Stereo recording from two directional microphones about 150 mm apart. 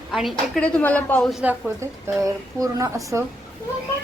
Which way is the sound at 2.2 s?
20° right (ahead or behind).